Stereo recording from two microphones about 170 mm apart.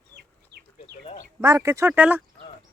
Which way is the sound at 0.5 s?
80° right.